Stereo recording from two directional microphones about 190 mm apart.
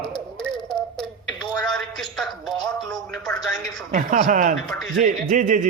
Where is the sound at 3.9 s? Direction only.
40° right (ahead or behind).